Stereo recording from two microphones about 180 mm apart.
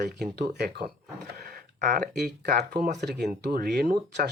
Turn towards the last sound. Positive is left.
turn(degrees=-65)  # may be behind; listen again after turning